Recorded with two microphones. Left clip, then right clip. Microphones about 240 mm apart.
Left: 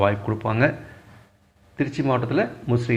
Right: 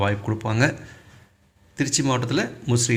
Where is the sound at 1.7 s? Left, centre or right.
Right.